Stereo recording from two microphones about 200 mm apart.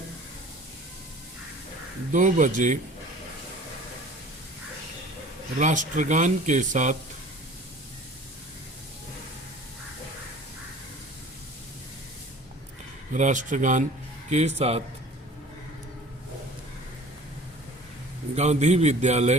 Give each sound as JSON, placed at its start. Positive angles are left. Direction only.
{"t": 2.1, "sound": "speech", "side_deg": -40}
{"t": 5.5, "sound": "speech", "side_deg": -40}
{"t": 13.1, "sound": "speech", "side_deg": -40}
{"t": 18.3, "sound": "speech", "side_deg": -35}